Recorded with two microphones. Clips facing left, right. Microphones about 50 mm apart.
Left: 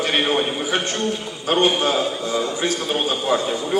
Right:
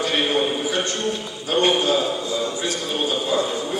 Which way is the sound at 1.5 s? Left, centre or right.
Left.